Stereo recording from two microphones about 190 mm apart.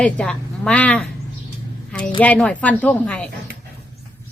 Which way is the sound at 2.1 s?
5° left (ahead or behind).